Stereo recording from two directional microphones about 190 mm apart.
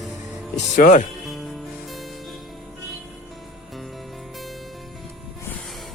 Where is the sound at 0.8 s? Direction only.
45° left (ahead or behind).